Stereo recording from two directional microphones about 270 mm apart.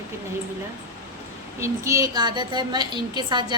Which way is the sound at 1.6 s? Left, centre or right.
Centre.